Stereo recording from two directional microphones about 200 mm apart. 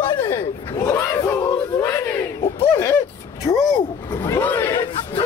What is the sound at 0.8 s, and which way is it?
Battle cry, 15° left (ahead or behind).